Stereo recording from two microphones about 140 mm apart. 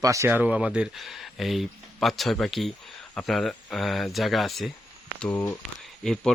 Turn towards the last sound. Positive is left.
turn(degrees=5)  # may be behind; listen again after turning